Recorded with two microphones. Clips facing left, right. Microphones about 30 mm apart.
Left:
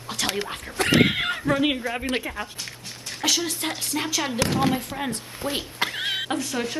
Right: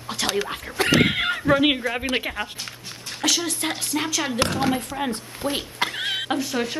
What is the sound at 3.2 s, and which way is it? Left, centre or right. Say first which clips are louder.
A woman's voice: right 1 dB; centre.